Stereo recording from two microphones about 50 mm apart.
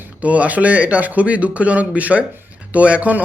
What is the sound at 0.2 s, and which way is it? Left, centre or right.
Speech, right.